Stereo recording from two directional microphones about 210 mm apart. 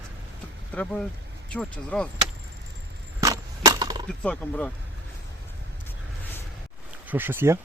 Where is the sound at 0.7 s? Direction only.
5° left (ahead or behind).